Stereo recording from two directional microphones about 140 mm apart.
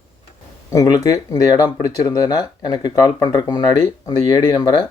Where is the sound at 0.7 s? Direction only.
25° left (ahead or behind).